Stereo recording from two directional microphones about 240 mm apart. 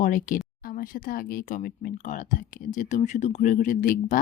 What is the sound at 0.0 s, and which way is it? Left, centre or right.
Speech, left.